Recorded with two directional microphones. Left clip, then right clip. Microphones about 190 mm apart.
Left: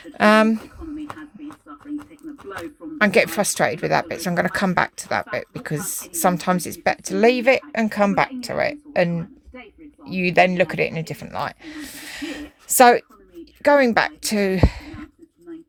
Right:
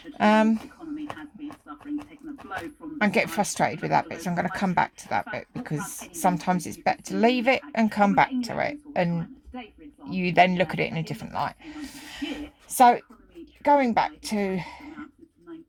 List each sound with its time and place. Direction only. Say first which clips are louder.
0.1 s speech: left 6 dB; 25° left (ahead or behind)
3.0 s a woman's voice: left 7 dB; 25° left (ahead or behind)